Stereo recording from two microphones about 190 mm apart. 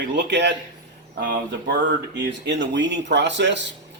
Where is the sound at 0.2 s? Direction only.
65° right (ahead or behind).